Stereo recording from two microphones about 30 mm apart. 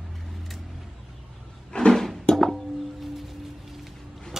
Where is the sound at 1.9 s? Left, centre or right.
Centre.